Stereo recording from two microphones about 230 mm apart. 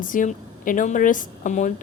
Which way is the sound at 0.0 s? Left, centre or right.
Left.